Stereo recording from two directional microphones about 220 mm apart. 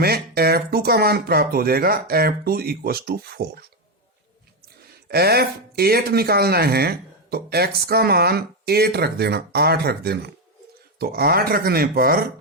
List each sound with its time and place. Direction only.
0.0 s speech: 45° right (ahead or behind)
5.0 s speech: 45° right (ahead or behind)